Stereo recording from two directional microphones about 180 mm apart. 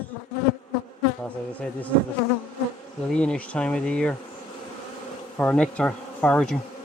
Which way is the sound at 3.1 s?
5° left (ahead or behind).